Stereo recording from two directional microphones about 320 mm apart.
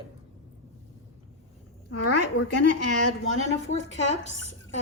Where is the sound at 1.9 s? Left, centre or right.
Left.